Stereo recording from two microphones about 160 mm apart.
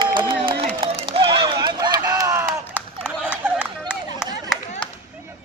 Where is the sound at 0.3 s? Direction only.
30° right (ahead or behind); by 3.1 s 15° right (ahead or behind).